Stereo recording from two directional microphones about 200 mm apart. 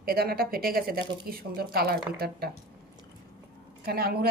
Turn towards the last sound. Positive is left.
turn(degrees=-50)  # may be behind; listen again after turning